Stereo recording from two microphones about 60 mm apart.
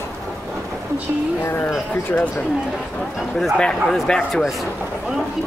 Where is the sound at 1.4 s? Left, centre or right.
Left.